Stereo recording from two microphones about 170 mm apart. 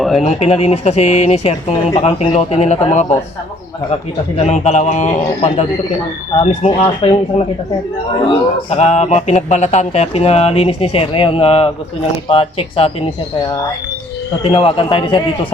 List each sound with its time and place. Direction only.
0.2 s speech: 40° left (ahead or behind)
4.4 s speech: 40° left (ahead or behind)
14.5 s speech: 30° left (ahead or behind)